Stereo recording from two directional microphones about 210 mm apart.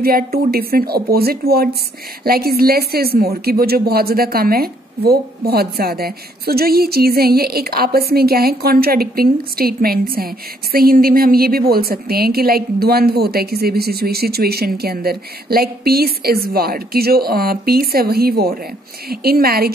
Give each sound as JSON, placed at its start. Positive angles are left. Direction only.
{"t": 0.0, "sound": "speech", "side_deg": -45}